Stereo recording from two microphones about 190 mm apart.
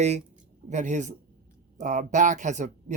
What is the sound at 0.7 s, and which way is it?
Speech, 40° right (ahead or behind).